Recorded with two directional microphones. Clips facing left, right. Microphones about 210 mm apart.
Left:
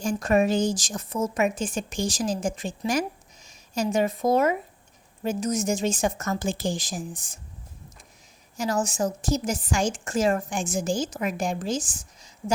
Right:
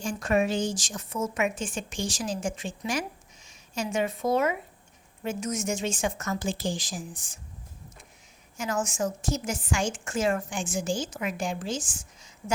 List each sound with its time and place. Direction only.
0.0 s speech: 40° left (ahead or behind)
8.5 s speech: 35° left (ahead or behind)